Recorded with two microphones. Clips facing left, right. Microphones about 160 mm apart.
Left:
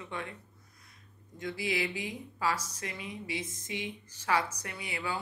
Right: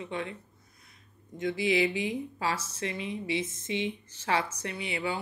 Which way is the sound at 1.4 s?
25° right (ahead or behind).